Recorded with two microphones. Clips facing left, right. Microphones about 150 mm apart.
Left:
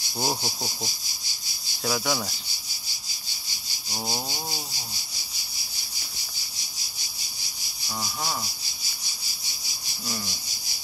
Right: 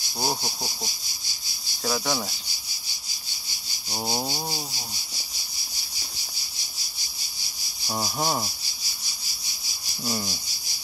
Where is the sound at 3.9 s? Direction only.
20° right (ahead or behind).